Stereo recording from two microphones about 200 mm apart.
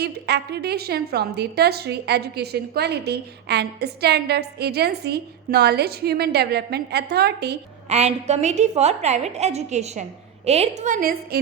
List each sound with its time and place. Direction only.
0.0 s a woman's voice: 55° right (ahead or behind)
7.9 s a woman's voice: 35° right (ahead or behind)